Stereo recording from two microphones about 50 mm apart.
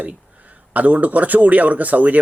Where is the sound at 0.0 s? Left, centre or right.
Right.